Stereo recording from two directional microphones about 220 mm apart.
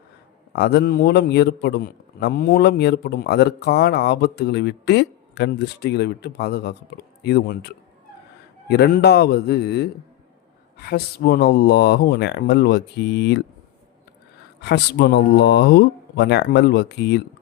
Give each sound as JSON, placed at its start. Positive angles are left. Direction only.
{"t": 0.5, "sound": "a man's voice", "side_deg": 50}
{"t": 8.7, "sound": "a man's voice", "side_deg": 50}
{"t": 14.6, "sound": "a man's voice", "side_deg": 50}